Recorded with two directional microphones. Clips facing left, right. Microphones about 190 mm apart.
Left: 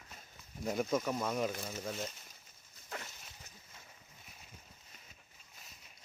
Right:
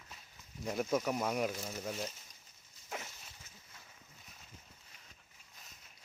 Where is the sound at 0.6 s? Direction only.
5° right (ahead or behind).